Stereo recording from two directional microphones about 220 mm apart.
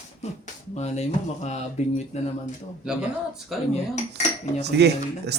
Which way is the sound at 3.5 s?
Centre (ahead or behind).